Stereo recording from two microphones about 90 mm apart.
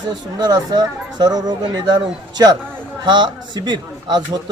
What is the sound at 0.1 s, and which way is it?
Speech, 50° right (ahead or behind).